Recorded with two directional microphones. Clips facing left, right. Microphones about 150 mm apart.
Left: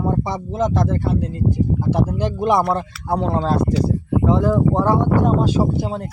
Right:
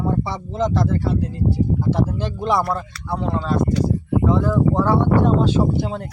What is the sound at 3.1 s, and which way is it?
Speech, 40° left (ahead or behind).